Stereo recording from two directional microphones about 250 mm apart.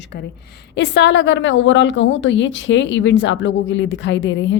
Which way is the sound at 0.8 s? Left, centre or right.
Left.